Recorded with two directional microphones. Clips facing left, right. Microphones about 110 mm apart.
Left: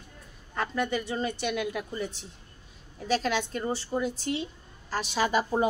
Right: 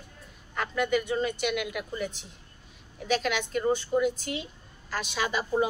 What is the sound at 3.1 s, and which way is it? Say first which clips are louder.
A woman's voice: even; 35° left (ahead or behind).